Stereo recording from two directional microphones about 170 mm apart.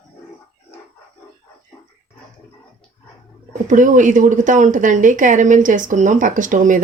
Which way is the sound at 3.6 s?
50° right (ahead or behind).